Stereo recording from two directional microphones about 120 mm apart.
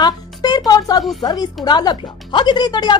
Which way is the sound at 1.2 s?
35° left (ahead or behind).